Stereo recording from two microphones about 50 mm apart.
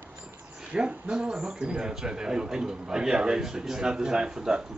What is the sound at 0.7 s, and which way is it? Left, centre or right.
A man's voice, centre.